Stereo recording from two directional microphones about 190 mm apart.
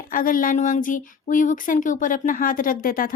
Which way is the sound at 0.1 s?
45° left (ahead or behind).